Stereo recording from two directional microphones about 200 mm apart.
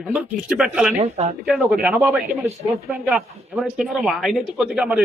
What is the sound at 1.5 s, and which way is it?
A man's voice, 5° right (ahead or behind).